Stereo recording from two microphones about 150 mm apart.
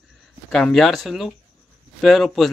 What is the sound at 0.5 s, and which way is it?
Speech, 5° left (ahead or behind).